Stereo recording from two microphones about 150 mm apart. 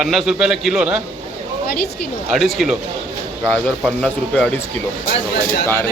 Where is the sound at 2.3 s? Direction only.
Centre (ahead or behind).